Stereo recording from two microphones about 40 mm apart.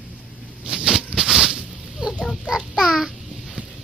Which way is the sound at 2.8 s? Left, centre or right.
Centre.